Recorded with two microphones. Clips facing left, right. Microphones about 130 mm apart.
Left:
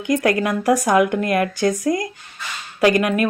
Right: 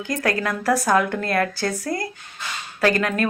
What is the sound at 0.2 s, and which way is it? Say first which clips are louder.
Speech: left 5 dB; 20° left (ahead or behind).